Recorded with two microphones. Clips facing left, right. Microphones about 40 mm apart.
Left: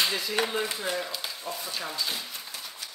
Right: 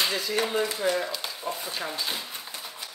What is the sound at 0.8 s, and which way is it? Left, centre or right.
Speech, centre.